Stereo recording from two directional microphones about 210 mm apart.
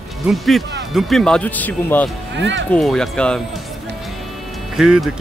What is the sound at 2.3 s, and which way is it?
Speech, 60° right (ahead or behind).